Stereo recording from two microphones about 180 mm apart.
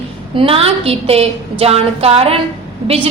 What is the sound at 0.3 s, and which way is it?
A woman's voice, 30° right (ahead or behind).